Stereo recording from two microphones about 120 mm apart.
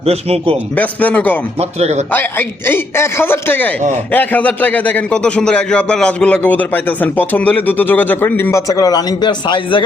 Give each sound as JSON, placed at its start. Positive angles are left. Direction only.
{"t": 0.0, "sound": "a man's voice", "side_deg": -55}
{"t": 0.8, "sound": "a man's voice", "side_deg": 15}
{"t": 1.8, "sound": "a man's voice", "side_deg": -65}
{"t": 2.1, "sound": "a man's voice", "side_deg": 15}